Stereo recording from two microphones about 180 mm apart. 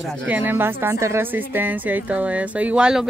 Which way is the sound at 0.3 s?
10° right (ahead or behind).